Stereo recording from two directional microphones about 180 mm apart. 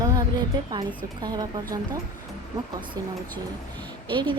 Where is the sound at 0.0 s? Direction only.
20° right (ahead or behind).